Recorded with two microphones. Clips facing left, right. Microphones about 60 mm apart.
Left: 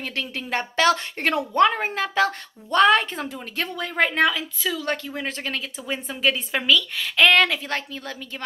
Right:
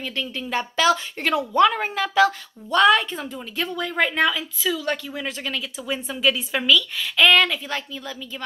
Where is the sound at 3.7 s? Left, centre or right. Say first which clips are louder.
Left 1 dB; left.